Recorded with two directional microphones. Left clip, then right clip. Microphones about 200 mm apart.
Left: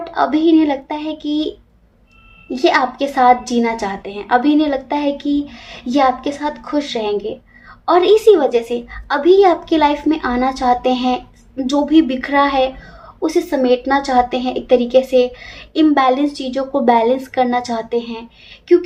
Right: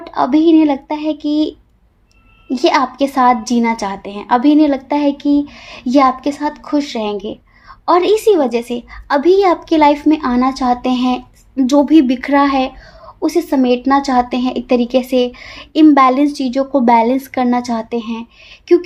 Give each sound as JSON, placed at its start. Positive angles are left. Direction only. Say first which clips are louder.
{"t": 0.0, "sound": "speech", "louder": "right 2 dB", "side_deg": -45}